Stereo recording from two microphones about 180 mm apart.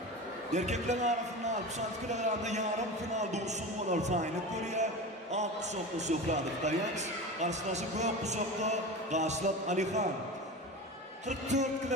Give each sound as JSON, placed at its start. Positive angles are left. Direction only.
{"t": 0.5, "sound": "speech", "side_deg": -40}
{"t": 5.9, "sound": "speech", "side_deg": -40}
{"t": 11.2, "sound": "speech", "side_deg": -40}